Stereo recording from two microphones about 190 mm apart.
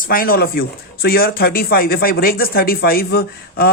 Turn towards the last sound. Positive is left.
turn(degrees=55)  # may be behind; listen again after turning